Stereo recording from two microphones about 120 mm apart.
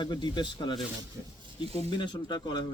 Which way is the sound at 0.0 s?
40° left (ahead or behind).